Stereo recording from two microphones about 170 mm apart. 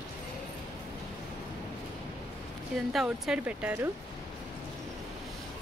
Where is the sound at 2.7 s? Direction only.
Centre (ahead or behind).